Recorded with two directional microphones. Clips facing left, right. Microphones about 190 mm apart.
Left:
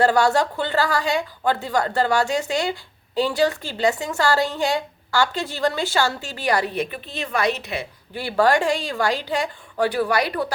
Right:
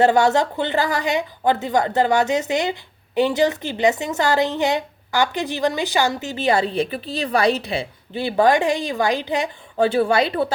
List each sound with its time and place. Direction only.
0.0 s a woman's voice: 20° right (ahead or behind)